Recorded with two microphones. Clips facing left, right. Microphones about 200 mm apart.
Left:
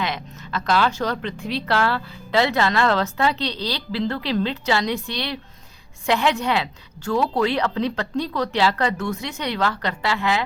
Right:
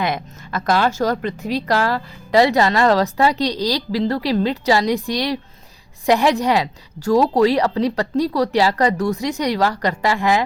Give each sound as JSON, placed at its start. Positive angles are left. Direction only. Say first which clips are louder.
{"t": 0.0, "sound": "speech", "louder": "right 5 dB", "side_deg": -50}